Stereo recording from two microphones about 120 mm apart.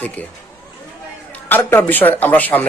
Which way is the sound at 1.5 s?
20° left (ahead or behind).